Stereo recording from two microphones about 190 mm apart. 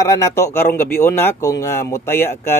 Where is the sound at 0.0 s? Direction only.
15° left (ahead or behind).